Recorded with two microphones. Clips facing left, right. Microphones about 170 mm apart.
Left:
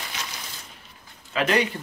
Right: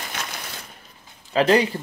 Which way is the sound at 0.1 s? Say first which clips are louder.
Right 3 dB; 55° right (ahead or behind).